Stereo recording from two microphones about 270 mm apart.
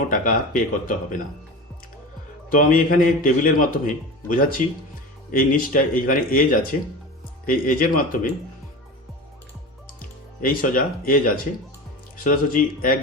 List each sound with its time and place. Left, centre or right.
0.1 s speech: left
2.5 s a man's voice: left
10.4 s a man's voice: left
12.2 s a man's voice: left